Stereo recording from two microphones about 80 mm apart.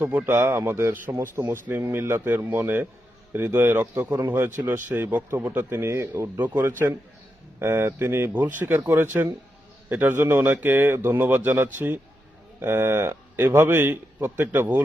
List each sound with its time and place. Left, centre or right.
0.0 s a man's voice: right
1.5 s a man's voice: right
6.4 s a man's voice: right